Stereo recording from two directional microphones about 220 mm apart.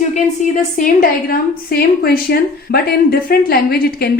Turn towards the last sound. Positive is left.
turn(degrees=45)  # may be behind; listen again after turning